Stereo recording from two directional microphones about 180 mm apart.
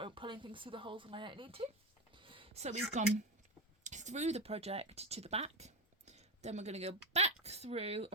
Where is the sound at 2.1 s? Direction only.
30° right (ahead or behind).